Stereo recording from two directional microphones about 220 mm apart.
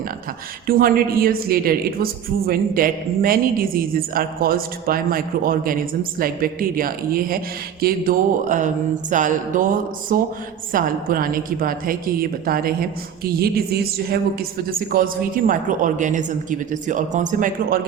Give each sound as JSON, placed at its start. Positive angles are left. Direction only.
{"t": 0.7, "sound": "a woman's voice", "side_deg": -40}